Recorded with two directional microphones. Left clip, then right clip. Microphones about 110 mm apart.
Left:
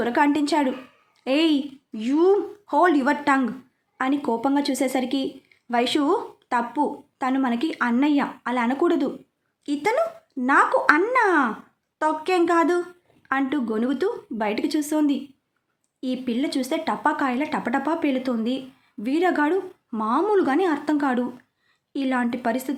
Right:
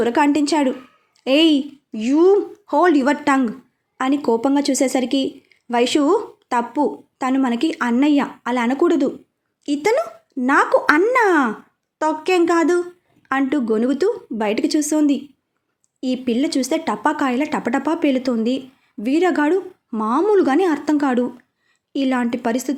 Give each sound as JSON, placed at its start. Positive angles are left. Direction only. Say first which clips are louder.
{"t": 0.0, "sound": "a woman's voice", "louder": "right 4 dB", "side_deg": -30}